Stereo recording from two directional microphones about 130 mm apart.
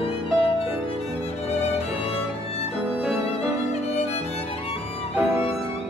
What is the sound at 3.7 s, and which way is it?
Music, 55° left (ahead or behind).